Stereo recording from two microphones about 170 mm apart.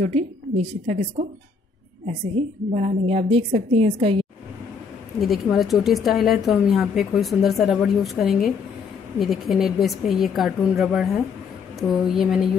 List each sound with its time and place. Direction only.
0.0 s a woman's voice: 40° right (ahead or behind)
2.0 s a woman's voice: 40° right (ahead or behind)
5.2 s speech: centre (ahead or behind)